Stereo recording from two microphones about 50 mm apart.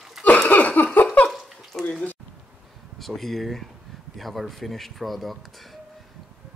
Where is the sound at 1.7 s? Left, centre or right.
Centre.